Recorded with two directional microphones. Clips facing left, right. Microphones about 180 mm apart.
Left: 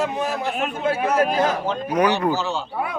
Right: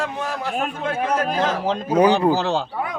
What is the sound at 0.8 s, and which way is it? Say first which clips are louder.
Speech: left 4 dB; 10° left (ahead or behind).